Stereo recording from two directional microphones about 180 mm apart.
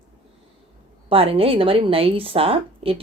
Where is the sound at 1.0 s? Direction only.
30° right (ahead or behind).